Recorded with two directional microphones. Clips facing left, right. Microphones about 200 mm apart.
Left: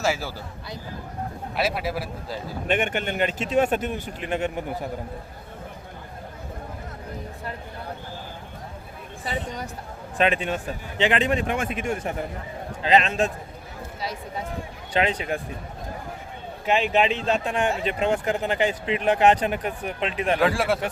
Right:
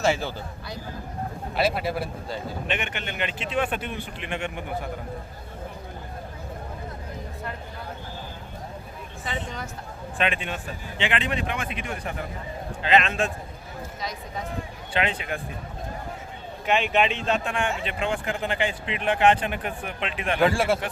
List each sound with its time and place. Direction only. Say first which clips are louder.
0.0 s a man's voice: right 2 dB; 5° left (ahead or behind)
2.6 s speech: left 10 dB; 45° left (ahead or behind)
10.2 s speech: left 5 dB; 40° left (ahead or behind)
16.6 s speech: left 2 dB; 35° left (ahead or behind)
20.4 s a man's voice: right 2 dB; centre (ahead or behind)